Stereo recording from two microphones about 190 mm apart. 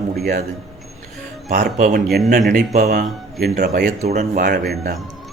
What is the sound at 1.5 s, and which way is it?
A man's voice, 55° right (ahead or behind).